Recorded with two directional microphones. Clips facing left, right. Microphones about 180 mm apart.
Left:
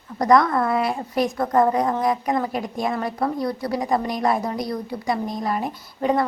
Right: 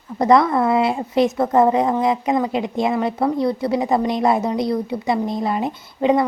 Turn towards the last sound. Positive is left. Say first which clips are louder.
# right 4 dB
turn(degrees=-20)  # may be behind; listen again after turning